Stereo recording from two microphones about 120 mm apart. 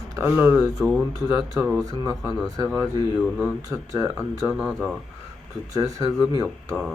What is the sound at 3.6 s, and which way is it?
Speech, 30° right (ahead or behind).